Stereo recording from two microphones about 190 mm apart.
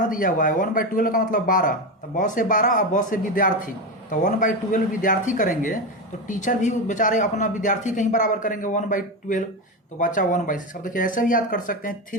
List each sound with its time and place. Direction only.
0.1 s speech: 45° left (ahead or behind)